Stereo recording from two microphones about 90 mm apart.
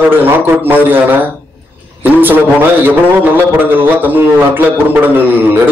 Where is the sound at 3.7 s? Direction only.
20° right (ahead or behind).